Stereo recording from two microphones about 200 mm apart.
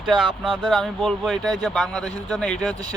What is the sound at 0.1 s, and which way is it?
Speech, 25° right (ahead or behind).